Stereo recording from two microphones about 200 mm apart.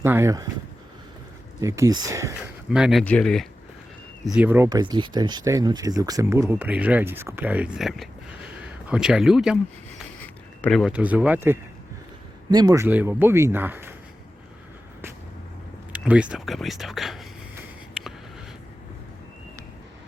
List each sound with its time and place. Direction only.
0.0 s speech: 10° right (ahead or behind)
1.6 s speech: 15° right (ahead or behind)
2.6 s speech: 5° right (ahead or behind)
4.4 s speech: 10° right (ahead or behind)
10.6 s speech: 5° left (ahead or behind)
15.9 s speech: 5° right (ahead or behind)